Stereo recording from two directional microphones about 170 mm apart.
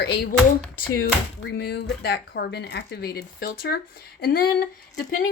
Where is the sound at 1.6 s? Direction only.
75° left (ahead or behind).